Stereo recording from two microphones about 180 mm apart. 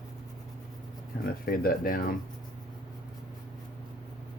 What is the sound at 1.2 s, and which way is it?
Speech, 55° left (ahead or behind).